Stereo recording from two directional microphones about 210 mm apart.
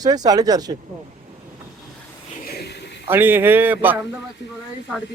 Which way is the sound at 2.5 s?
50° left (ahead or behind).